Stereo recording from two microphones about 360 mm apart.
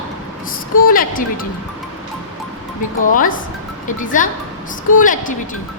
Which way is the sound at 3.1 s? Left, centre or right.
Left.